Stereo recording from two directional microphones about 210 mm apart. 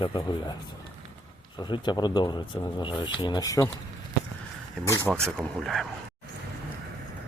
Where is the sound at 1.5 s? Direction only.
20° left (ahead or behind).